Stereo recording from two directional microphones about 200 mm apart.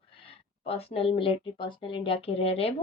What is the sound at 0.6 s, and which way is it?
Speech, 30° left (ahead or behind).